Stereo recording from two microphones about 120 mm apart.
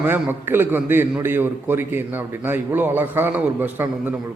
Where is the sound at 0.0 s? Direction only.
15° right (ahead or behind).